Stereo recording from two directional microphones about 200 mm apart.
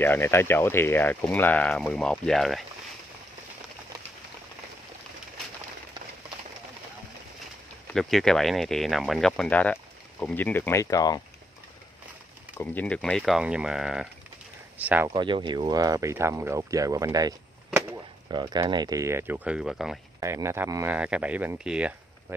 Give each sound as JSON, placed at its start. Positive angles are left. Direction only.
{"t": 0.0, "sound": "speech", "side_deg": 10}
{"t": 7.9, "sound": "speech", "side_deg": 0}
{"t": 12.5, "sound": "speech", "side_deg": 5}
{"t": 15.1, "sound": "speech", "side_deg": -25}
{"t": 17.6, "sound": "a sound", "side_deg": -10}
{"t": 18.3, "sound": "speech", "side_deg": -20}
{"t": 20.2, "sound": "speech", "side_deg": -15}